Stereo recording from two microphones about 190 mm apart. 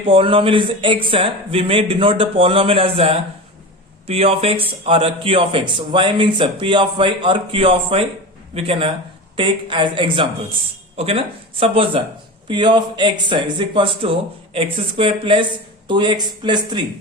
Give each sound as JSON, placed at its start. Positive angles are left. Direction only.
{"t": 0.0, "sound": "a man's voice", "side_deg": -30}